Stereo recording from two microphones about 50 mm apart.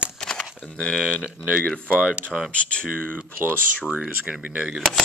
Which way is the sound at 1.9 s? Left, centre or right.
Right.